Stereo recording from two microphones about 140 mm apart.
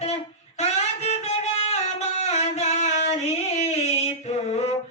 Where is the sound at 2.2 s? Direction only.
50° left (ahead or behind).